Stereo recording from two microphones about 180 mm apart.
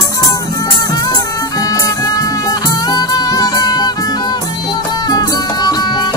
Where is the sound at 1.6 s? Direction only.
20° left (ahead or behind).